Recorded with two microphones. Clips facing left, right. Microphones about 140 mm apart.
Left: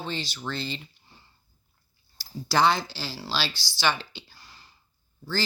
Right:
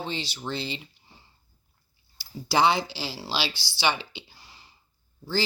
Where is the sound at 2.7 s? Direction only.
65° right (ahead or behind).